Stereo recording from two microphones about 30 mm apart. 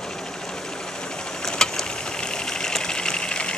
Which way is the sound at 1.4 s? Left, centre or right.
Left.